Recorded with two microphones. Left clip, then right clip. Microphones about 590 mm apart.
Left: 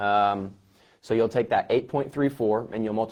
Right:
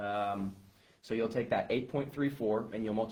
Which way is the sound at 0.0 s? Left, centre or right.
Left.